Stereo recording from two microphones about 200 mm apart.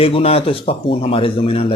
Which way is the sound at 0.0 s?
30° left (ahead or behind).